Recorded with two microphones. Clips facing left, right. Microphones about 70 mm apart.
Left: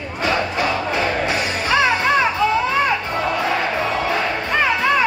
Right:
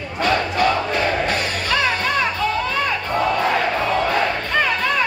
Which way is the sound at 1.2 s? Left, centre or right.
Centre.